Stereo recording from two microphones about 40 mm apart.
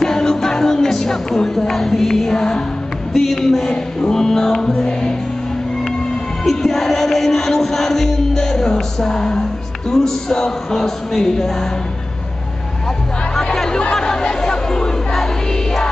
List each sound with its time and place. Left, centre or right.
0.0 s music: centre
6.4 s music: centre
13.7 s chatter: left